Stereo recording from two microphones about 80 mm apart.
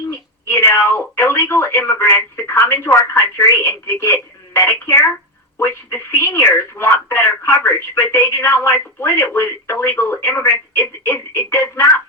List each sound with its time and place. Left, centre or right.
0.1 s speech: left